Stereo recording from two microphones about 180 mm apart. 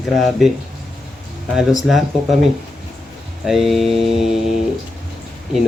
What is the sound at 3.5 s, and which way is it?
Speech, centre (ahead or behind).